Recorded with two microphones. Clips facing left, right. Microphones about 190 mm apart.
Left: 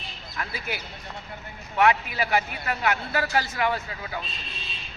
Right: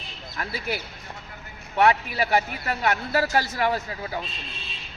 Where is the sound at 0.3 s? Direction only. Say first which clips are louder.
Right 3 dB; 35° right (ahead or behind).